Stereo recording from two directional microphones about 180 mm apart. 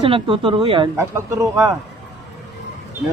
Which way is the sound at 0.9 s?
15° right (ahead or behind).